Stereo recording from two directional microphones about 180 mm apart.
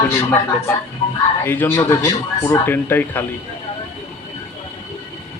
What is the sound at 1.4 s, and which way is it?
A man's voice, 10° left (ahead or behind).